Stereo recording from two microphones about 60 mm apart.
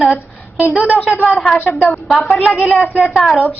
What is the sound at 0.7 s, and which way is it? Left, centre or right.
Speech, left.